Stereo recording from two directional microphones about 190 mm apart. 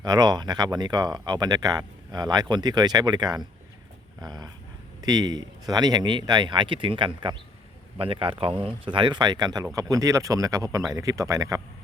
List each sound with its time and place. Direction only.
0.0 s speech: 20° right (ahead or behind)